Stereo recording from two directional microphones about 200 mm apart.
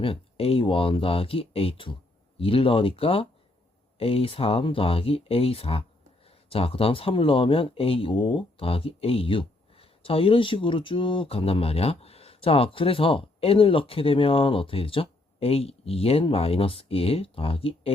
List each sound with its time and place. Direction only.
0.0 s speech: 30° left (ahead or behind)